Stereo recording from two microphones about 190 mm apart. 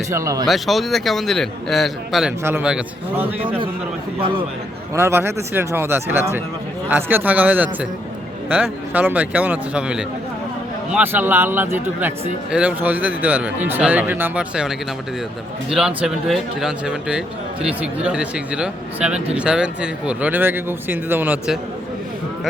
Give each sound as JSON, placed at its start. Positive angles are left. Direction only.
{"t": 0.1, "sound": "speech", "side_deg": -15}
{"t": 0.4, "sound": "speech", "side_deg": 0}
{"t": 2.4, "sound": "speech", "side_deg": -10}
{"t": 4.9, "sound": "speech", "side_deg": -15}
{"t": 15.7, "sound": "speech", "side_deg": -5}